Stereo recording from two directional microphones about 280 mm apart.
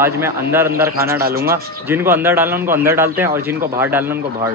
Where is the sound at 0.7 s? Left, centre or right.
Right.